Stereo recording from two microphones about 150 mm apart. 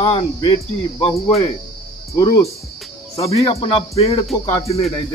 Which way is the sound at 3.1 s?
40° left (ahead or behind).